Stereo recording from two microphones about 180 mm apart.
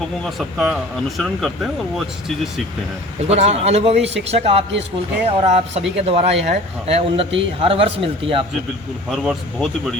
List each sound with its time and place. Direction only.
0.3 s speech: centre (ahead or behind)
3.2 s a man's voice: 35° right (ahead or behind)
4.0 s speech: 80° right
4.3 s a man's voice: 35° right (ahead or behind)
9.0 s speech: centre (ahead or behind)